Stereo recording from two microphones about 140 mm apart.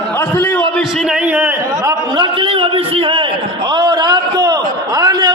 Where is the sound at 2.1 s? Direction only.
40° right (ahead or behind).